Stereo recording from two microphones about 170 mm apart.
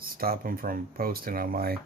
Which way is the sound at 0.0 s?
60° right (ahead or behind).